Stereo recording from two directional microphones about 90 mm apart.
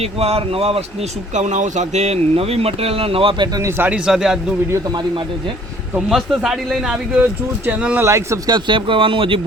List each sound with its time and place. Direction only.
0.2 s speech: 90° right
2.3 s speech: 90° right
3.8 s a man's voice: 15° right (ahead or behind)
6.1 s a man's voice: 5° right (ahead or behind)
8.0 s speech: 35° right (ahead or behind)
8.4 s speech: 60° right (ahead or behind); by 9.4 s 80° right